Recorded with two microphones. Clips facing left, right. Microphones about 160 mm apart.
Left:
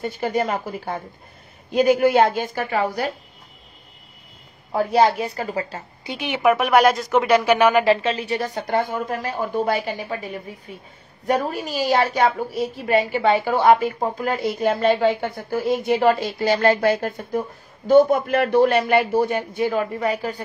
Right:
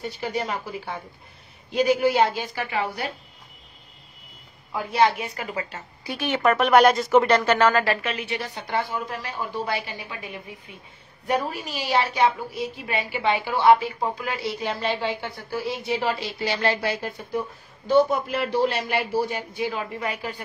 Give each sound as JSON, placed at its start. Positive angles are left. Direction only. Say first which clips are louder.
{"t": 0.0, "sound": "a woman's voice", "louder": "left 6 dB", "side_deg": 50}
{"t": 4.7, "sound": "a woman's voice", "louder": "left 4 dB", "side_deg": 40}
{"t": 6.0, "sound": "a woman's voice", "louder": "left 3 dB", "side_deg": 15}